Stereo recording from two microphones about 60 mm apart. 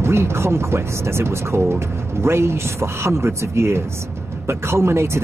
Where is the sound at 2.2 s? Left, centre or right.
Right.